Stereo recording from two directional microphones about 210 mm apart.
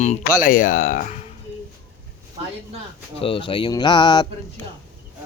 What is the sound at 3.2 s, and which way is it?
Speech, 25° left (ahead or behind).